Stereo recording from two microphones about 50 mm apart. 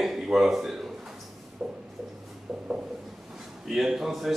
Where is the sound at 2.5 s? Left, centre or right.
Centre.